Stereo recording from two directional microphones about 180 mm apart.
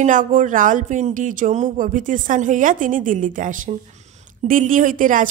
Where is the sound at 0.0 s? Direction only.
45° right (ahead or behind).